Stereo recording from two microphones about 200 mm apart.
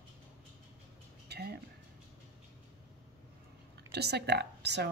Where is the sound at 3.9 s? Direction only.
55° right (ahead or behind).